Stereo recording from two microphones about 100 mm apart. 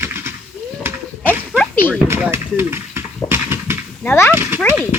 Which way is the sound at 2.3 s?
25° right (ahead or behind).